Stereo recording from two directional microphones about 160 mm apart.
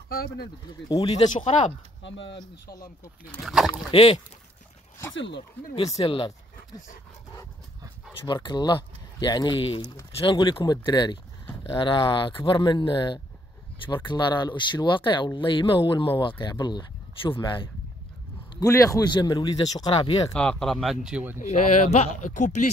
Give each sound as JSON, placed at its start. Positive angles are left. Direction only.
{"t": 0.1, "sound": "speech", "side_deg": 80}
{"t": 0.8, "sound": "speech", "side_deg": 30}
{"t": 1.3, "sound": "speech", "side_deg": 50}
{"t": 2.2, "sound": "speech", "side_deg": 25}
{"t": 3.3, "sound": "speech", "side_deg": 0}
{"t": 3.9, "sound": "speech", "side_deg": 35}
{"t": 5.9, "sound": "speech", "side_deg": 35}
{"t": 8.3, "sound": "speech", "side_deg": 25}
{"t": 18.6, "sound": "speech", "side_deg": 20}
{"t": 20.3, "sound": "speech", "side_deg": 5}
{"t": 21.4, "sound": "speech", "side_deg": 45}